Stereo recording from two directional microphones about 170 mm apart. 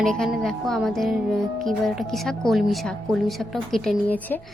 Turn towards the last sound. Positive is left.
turn(degrees=5)  # may be behind; listen again after turning